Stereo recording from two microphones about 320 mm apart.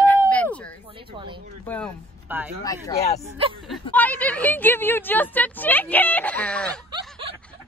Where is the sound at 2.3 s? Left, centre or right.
Centre.